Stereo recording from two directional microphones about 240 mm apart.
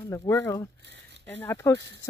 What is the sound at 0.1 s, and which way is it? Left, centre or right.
Speech, centre.